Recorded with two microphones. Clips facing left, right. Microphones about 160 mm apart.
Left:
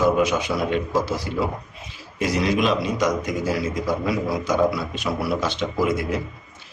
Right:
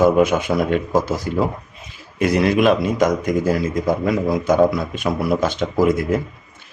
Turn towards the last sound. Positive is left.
turn(degrees=-45)  # may be behind; listen again after turning